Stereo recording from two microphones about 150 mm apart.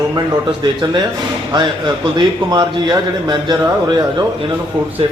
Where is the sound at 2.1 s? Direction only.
30° right (ahead or behind).